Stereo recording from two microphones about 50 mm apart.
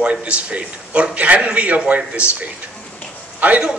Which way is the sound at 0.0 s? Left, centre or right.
Right.